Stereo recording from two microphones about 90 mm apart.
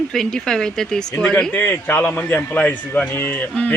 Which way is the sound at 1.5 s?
20° left (ahead or behind).